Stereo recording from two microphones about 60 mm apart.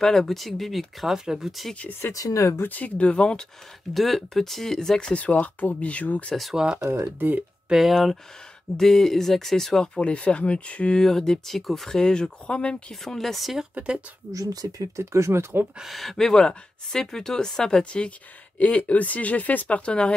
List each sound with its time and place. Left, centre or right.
0.0 s speech: centre
1.8 s speech: left
2.1 s speech: left
2.6 s speech: left
3.9 s speech: centre
5.1 s speech: left
6.5 s speech: centre
7.2 s speech: right
7.7 s speech: centre
9.9 s speech: centre
13.0 s speech: centre
14.3 s speech: right
15.0 s speech: right
15.8 s speech: centre